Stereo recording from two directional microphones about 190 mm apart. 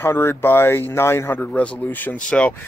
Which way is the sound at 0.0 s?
10° left (ahead or behind).